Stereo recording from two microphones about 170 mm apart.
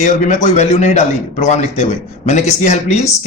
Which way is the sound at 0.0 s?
45° left (ahead or behind).